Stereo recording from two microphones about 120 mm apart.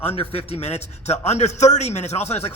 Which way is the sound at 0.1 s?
50° left (ahead or behind).